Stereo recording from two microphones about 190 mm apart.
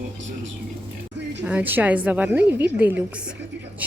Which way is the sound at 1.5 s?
10° right (ahead or behind).